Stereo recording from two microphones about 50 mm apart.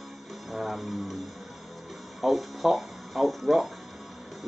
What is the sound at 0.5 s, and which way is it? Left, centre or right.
Music, centre.